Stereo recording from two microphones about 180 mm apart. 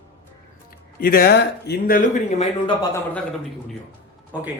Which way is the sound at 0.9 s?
55° left (ahead or behind).